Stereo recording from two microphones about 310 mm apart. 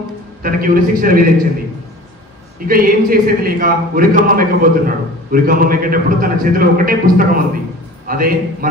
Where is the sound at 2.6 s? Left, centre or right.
Right.